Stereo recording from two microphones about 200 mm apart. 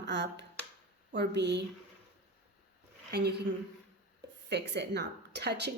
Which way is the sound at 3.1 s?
55° right (ahead or behind).